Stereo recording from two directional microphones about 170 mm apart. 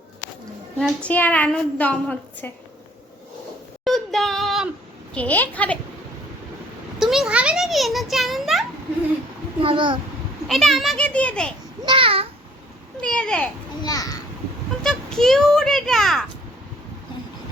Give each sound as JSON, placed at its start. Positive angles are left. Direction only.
{"t": 0.8, "sound": "a woman's voice", "side_deg": 5}
{"t": 3.8, "sound": "female singing", "side_deg": 0}
{"t": 5.1, "sound": "a woman's voice", "side_deg": 10}
{"t": 7.0, "sound": "a child's voice", "side_deg": 0}
{"t": 9.6, "sound": "a child's voice", "side_deg": -30}
{"t": 10.5, "sound": "a child's voice", "side_deg": 0}
{"t": 11.9, "sound": "babbling", "side_deg": -30}
{"t": 13.0, "sound": "speech", "side_deg": 5}
{"t": 13.8, "sound": "a child's voice", "side_deg": 20}
{"t": 14.8, "sound": "a child's voice", "side_deg": 5}